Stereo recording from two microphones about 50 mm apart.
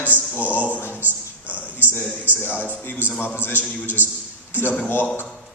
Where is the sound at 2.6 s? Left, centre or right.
Left.